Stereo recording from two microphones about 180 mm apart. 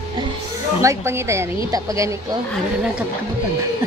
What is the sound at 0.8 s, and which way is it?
A woman's voice, 15° right (ahead or behind).